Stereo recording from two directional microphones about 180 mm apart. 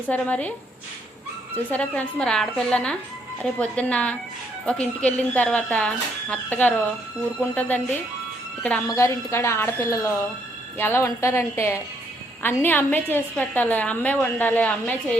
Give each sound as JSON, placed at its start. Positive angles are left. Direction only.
{"t": 0.1, "sound": "a woman's voice", "side_deg": 10}
{"t": 1.7, "sound": "a woman's voice", "side_deg": 5}
{"t": 8.9, "sound": "a woman's voice", "side_deg": 15}